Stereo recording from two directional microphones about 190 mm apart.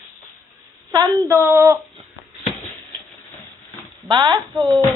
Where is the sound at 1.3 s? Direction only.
15° right (ahead or behind).